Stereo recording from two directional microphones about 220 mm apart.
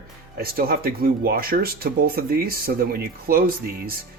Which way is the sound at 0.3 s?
40° right (ahead or behind).